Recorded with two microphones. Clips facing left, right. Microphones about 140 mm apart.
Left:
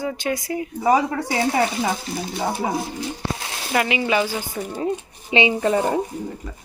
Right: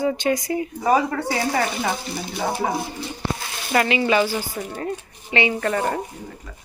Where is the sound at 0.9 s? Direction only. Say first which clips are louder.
Left 1 dB; 15° left (ahead or behind).